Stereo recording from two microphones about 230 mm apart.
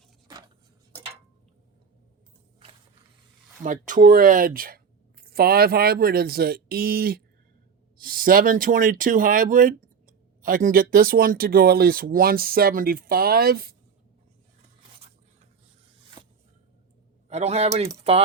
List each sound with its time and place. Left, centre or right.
3.6 s speech: right
16.2 s a sound: centre
17.2 s a man's voice: right